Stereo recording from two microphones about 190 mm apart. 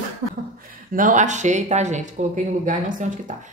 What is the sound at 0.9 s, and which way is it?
Speech, 45° right (ahead or behind).